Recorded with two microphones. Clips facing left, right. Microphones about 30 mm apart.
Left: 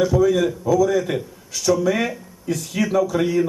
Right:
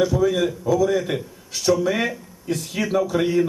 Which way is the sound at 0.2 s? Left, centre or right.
Centre.